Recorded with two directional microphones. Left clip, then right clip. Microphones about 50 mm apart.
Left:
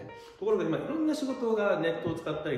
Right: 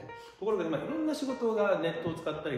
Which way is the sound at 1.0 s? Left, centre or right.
Right.